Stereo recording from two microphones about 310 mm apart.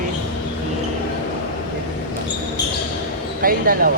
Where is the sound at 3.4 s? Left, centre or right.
Right.